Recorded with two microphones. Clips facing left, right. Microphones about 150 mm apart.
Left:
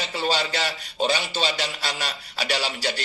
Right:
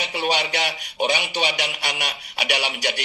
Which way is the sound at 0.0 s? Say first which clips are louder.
Right 1 dB; 15° right (ahead or behind).